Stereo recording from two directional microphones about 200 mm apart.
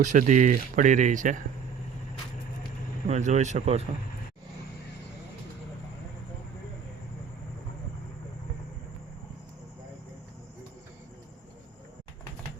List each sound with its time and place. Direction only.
0.0 s speech: 40° right (ahead or behind)
3.1 s speech: 35° right (ahead or behind)